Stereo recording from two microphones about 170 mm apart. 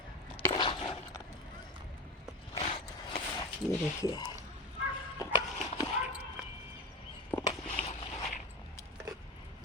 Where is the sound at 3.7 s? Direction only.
20° left (ahead or behind).